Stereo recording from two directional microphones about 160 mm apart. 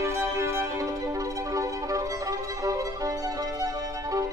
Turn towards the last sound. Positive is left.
turn(degrees=-20)  # may be behind; listen again after turning